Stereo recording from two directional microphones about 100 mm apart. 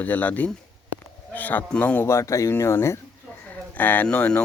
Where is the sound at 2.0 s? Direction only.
30° left (ahead or behind).